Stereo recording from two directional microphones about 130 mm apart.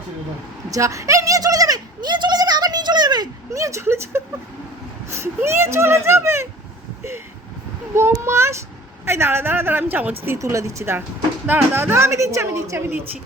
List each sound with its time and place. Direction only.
0.7 s a sound: 25° right (ahead or behind)
5.2 s a woman's voice: 20° right (ahead or behind)
7.9 s a woman's voice: 20° right (ahead or behind)